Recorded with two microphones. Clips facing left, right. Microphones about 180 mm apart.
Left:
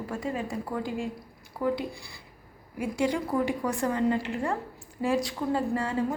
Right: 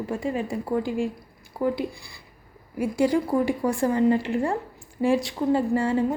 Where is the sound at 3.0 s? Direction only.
35° right (ahead or behind).